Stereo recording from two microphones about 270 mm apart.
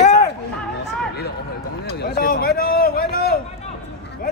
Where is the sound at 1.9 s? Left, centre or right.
Left.